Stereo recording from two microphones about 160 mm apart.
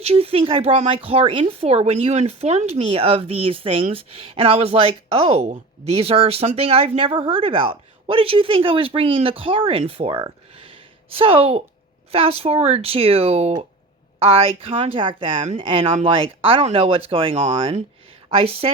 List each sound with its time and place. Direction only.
0.0 s a woman's voice: 40° right (ahead or behind)